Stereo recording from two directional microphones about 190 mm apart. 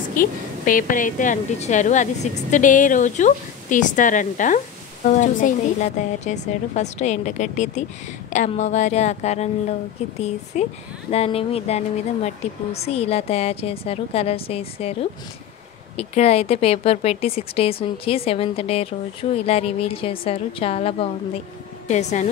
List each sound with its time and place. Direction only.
0.1 s a woman's voice: 45° left (ahead or behind)